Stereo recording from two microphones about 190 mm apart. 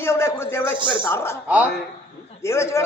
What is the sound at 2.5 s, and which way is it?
Speech, 15° left (ahead or behind).